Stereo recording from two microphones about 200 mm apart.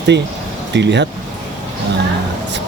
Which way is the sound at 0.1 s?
60° right (ahead or behind).